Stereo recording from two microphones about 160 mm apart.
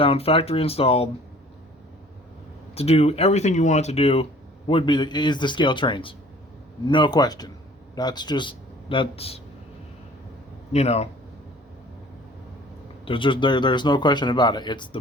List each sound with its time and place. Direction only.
0.0 s speech: 35° left (ahead or behind)
2.7 s a man's voice: 40° left (ahead or behind)
10.7 s speech: 40° left (ahead or behind)
13.1 s speech: 30° left (ahead or behind)